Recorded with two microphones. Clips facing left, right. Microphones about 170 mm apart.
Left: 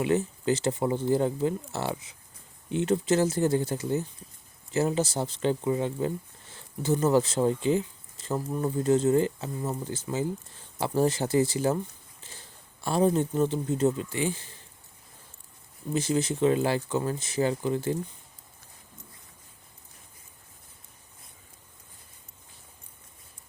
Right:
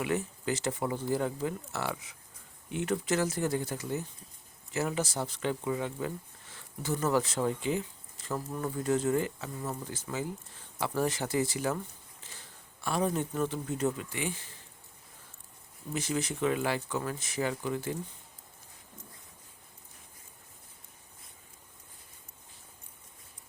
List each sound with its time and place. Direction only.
0.0 s a man's voice: 25° left (ahead or behind)
15.9 s speech: 30° left (ahead or behind)